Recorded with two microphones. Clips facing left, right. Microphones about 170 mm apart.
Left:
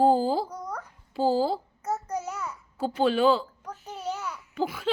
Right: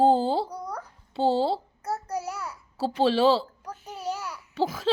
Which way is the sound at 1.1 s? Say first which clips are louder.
Right 1 dB; 25° right (ahead or behind).